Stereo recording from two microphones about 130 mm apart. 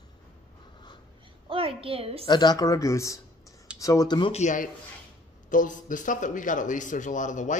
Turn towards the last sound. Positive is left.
turn(degrees=75)  # may be behind; listen again after turning